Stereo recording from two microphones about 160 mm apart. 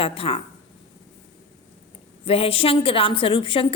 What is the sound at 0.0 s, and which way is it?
Speech, 35° left (ahead or behind).